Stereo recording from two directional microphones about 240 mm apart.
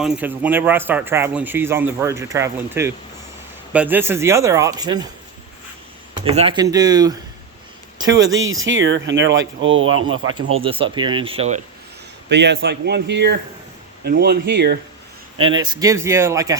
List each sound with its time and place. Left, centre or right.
0.0 s a man's voice: centre
6.2 s a man's voice: right
8.0 s speech: right
10.6 s speech: right
12.3 s speech: right
15.4 s a man's voice: centre